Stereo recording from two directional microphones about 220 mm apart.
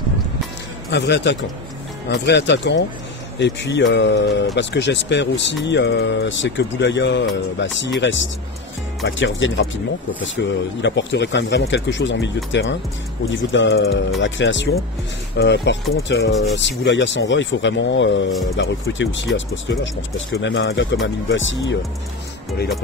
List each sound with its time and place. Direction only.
0.9 s speech: 50° left (ahead or behind)